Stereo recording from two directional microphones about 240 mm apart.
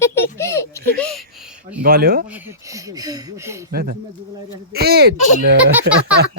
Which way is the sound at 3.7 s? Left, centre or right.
Right.